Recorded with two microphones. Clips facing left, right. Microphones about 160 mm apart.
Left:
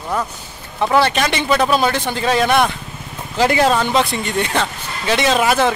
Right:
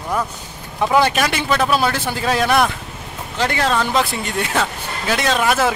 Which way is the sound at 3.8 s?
5° right (ahead or behind).